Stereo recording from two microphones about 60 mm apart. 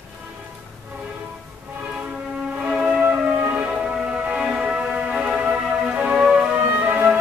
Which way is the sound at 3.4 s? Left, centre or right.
Right.